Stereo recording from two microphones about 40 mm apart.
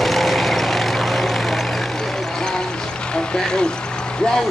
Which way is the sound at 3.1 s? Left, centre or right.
Centre.